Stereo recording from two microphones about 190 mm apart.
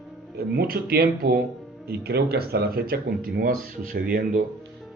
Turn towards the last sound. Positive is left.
turn(degrees=-50)  # may be behind; listen again after turning